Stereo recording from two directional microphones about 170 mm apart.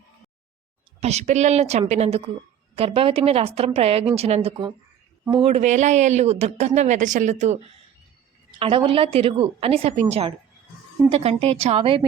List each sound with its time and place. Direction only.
0.9 s a woman's voice: 40° right (ahead or behind)
8.5 s a woman's voice: 30° right (ahead or behind)